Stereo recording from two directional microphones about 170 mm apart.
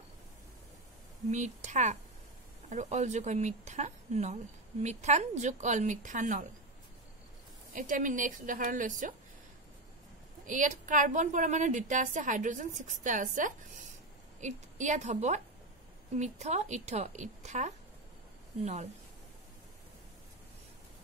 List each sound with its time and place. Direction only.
1.3 s speech: 45° right (ahead or behind)
7.7 s speech: 50° right (ahead or behind)
10.4 s a woman's voice: 50° right (ahead or behind)